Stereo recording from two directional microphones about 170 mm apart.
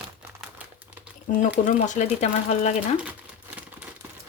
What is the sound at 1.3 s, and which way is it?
Speech, 50° left (ahead or behind).